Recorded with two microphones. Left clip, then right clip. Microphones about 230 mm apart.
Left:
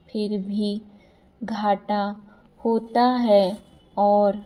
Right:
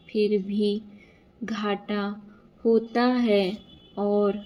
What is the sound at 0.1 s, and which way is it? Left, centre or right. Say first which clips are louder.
A woman's voice: right 4 dB; centre.